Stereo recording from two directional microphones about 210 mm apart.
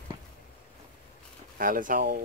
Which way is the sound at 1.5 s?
40° right (ahead or behind).